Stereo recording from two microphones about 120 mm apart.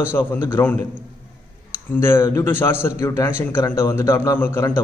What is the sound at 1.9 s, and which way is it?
A man's voice, 20° left (ahead or behind).